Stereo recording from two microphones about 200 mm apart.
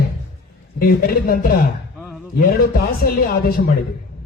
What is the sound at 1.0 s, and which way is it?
A man's voice, 50° left (ahead or behind).